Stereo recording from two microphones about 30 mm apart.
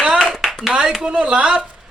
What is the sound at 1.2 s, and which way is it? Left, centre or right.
Speech, right.